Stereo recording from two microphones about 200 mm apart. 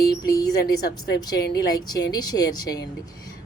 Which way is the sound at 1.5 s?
20° left (ahead or behind).